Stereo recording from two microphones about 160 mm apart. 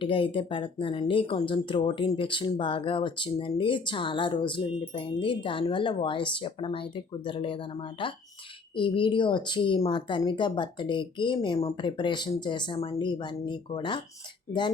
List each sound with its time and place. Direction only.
0.0 s a woman's voice: 35° left (ahead or behind)